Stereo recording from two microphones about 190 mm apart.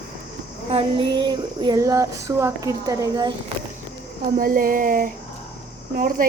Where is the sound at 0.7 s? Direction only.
30° right (ahead or behind).